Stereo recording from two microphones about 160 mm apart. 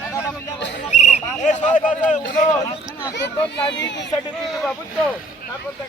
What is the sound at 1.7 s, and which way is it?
Speech, 55° left (ahead or behind).